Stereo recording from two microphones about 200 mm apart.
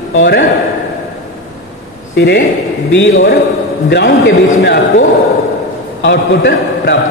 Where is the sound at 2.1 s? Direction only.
60° left (ahead or behind).